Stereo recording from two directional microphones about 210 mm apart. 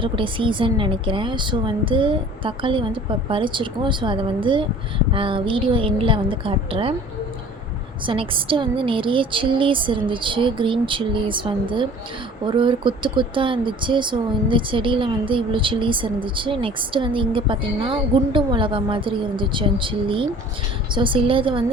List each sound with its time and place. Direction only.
0.0 s speech: 25° right (ahead or behind)
8.0 s speech: 25° right (ahead or behind)